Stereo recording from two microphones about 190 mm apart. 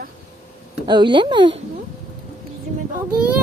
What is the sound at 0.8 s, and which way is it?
Speech, 25° right (ahead or behind).